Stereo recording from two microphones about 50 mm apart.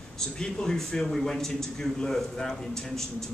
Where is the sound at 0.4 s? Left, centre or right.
Centre.